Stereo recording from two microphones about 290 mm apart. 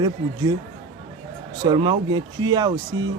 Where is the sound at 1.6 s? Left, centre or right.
Centre.